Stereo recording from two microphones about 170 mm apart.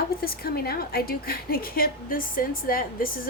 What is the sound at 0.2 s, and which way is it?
A woman's voice, 65° left (ahead or behind).